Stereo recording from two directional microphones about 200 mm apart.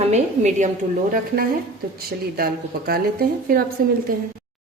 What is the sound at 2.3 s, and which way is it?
A woman's voice, 50° right (ahead or behind).